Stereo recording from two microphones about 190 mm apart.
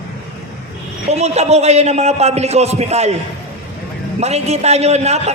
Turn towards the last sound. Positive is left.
turn(degrees=-35)  # may be behind; listen again after turning